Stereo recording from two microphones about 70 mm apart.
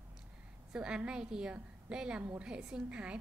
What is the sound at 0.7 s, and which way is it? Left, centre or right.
A woman's voice, centre.